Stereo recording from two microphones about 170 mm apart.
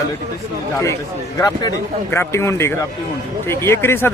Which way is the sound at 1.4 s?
20° left (ahead or behind).